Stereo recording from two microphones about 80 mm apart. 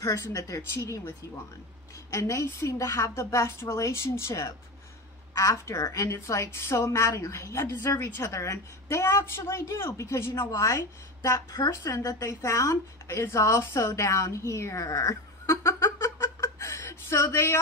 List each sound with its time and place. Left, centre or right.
0.0 s a woman's voice: left
10.5 s a woman's voice: left
11.2 s a woman's voice: left
11.7 s a woman's voice: left